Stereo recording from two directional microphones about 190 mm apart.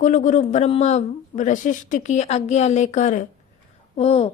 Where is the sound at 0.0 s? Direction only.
40° left (ahead or behind).